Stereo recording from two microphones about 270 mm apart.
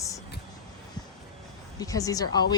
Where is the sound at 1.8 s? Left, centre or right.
Centre.